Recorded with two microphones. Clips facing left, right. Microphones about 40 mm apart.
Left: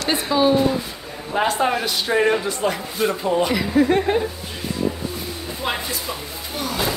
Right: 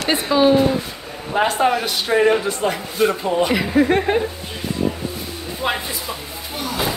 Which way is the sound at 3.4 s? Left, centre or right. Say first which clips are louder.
Right 2 dB; right.